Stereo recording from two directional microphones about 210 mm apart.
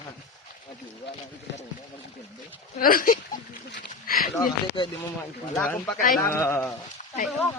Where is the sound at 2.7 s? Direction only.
45° left (ahead or behind).